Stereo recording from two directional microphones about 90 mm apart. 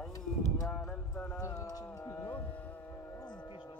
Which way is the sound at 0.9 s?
15° left (ahead or behind).